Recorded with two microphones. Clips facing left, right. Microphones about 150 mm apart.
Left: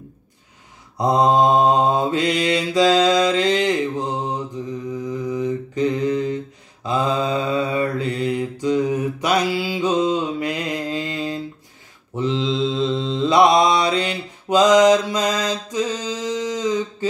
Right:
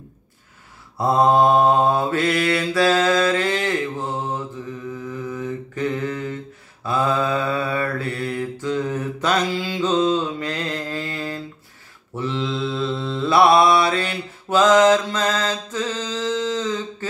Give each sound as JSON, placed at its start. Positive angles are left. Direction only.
{"t": 0.9, "sound": "mantra", "side_deg": 15}